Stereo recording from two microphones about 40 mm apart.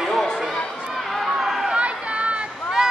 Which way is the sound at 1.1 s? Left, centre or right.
Centre.